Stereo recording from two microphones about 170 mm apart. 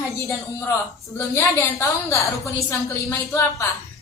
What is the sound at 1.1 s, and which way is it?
A woman's voice, 15° left (ahead or behind).